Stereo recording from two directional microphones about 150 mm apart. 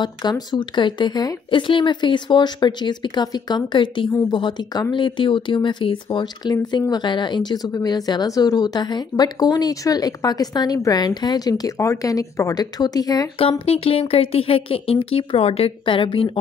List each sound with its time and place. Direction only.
0.0 s a woman's voice: 30° left (ahead or behind)
13.4 s a woman's voice: 40° left (ahead or behind)